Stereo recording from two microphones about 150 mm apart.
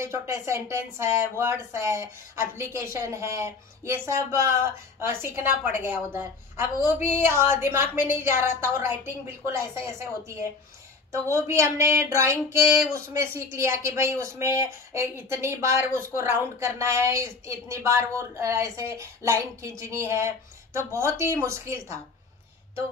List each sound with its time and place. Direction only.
0.0 s a woman's voice: 20° right (ahead or behind)